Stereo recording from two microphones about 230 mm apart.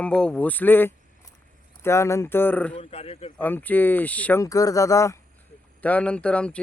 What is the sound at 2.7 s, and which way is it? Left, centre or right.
Speech, left.